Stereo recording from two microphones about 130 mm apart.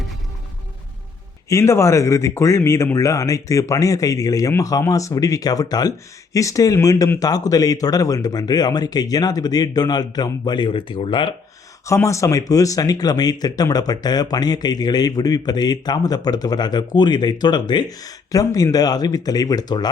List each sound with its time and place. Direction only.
1.5 s speech: 20° left (ahead or behind); by 11.3 s 40° left (ahead or behind)
11.9 s speech: 25° left (ahead or behind)